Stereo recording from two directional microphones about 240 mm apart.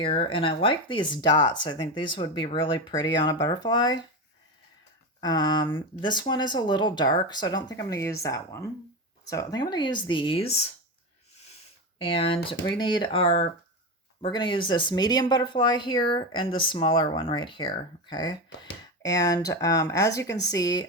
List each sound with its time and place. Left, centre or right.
0.0 s speech: left
5.2 s speech: centre
11.9 s speech: left